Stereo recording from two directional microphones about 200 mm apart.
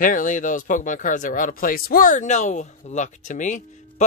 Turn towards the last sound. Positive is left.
turn(degrees=40)  # may be behind; listen again after turning